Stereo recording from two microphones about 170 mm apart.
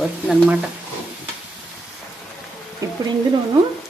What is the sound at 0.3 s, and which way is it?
Speech, 10° right (ahead or behind).